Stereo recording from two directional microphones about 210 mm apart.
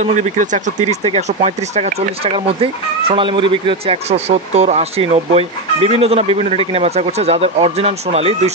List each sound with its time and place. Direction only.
0.0 s speech: 35° right (ahead or behind)